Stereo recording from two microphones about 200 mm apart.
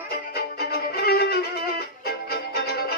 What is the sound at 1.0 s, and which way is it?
Violin, 50° left (ahead or behind).